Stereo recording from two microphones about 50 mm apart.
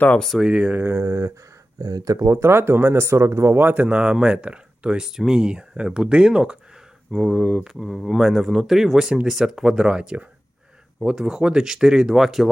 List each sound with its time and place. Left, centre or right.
0.4 s speech: right
0.9 s speech: right
2.1 s speech: right
3.6 s a man's voice: right
3.8 s speech: centre
7.7 s speech: centre